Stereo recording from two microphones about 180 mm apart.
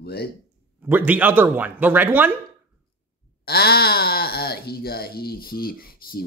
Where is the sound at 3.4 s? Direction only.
60° left (ahead or behind).